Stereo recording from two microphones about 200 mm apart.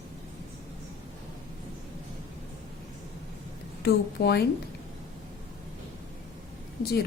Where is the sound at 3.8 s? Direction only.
55° left (ahead or behind).